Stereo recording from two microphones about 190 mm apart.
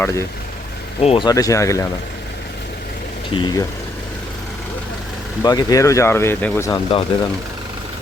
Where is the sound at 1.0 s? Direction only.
25° left (ahead or behind).